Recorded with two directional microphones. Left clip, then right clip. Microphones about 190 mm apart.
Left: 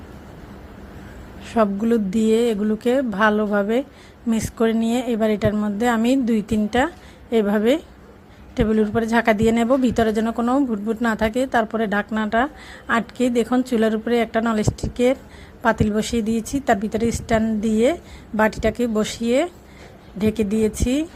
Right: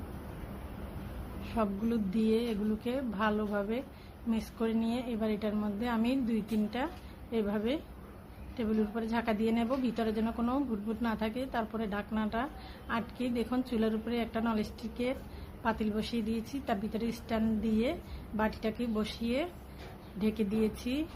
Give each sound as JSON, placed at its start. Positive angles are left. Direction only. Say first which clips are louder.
{"t": 1.5, "sound": "a woman's voice", "louder": "left 14 dB", "side_deg": 40}